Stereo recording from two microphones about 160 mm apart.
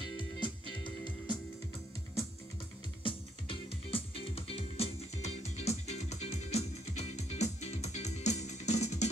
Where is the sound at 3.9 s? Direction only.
35° left (ahead or behind).